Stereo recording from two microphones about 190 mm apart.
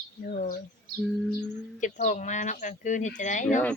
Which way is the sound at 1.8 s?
40° left (ahead or behind).